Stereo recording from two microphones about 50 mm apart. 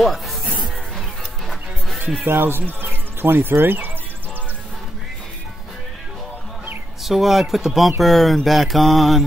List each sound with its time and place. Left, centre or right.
0.0 s speech: centre
2.2 s speech: right
7.0 s mantra: centre